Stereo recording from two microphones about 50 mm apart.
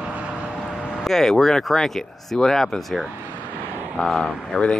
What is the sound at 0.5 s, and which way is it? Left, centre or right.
Vehicle, centre.